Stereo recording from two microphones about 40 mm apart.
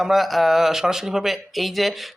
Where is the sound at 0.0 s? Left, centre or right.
Centre.